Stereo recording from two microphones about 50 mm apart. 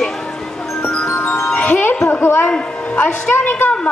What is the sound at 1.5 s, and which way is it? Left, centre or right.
Wind chime, left.